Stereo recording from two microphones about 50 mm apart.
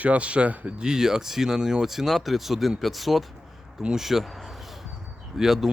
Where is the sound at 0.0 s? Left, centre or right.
Right.